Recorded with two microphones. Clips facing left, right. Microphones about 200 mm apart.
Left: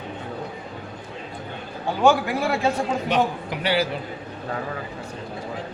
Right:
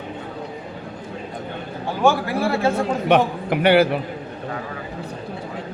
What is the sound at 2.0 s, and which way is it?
Speech, 15° left (ahead or behind).